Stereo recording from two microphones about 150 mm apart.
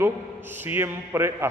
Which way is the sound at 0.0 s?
15° right (ahead or behind).